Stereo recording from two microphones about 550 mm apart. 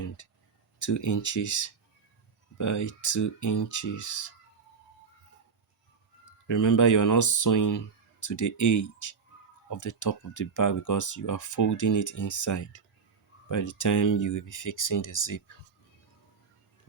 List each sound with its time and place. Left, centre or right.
0.2 s speech: left
6.5 s speech: left